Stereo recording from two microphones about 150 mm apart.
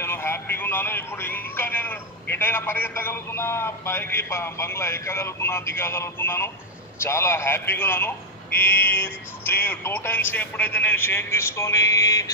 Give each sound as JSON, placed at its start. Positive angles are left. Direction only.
{"t": 0.0, "sound": "speech", "side_deg": 15}